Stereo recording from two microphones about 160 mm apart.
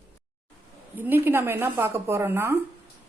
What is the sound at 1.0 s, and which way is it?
A woman's voice, 10° right (ahead or behind).